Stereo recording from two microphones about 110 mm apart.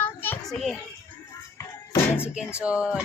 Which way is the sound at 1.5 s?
20° left (ahead or behind).